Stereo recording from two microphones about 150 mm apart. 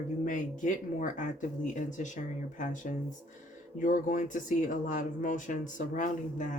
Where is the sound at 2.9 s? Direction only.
60° left (ahead or behind).